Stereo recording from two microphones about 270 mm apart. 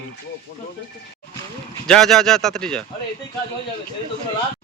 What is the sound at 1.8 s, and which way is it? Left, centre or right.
Speech, centre.